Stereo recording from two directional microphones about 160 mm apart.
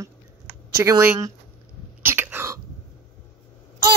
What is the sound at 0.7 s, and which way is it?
Speech, 20° right (ahead or behind).